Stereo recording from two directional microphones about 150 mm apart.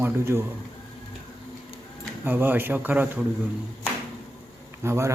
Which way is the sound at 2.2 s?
10° right (ahead or behind).